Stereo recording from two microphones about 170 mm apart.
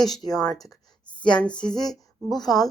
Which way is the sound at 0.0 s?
20° left (ahead or behind).